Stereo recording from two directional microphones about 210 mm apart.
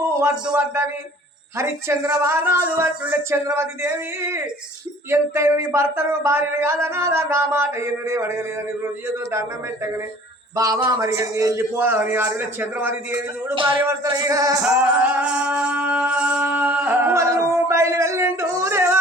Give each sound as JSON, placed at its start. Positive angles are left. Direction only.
{"t": 0.2, "sound": "speech", "side_deg": -10}
{"t": 13.6, "sound": "speech", "side_deg": -20}
{"t": 14.7, "sound": "music", "side_deg": -5}